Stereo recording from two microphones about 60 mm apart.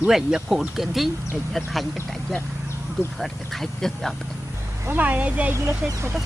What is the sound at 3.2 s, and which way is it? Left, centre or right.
Speech, centre.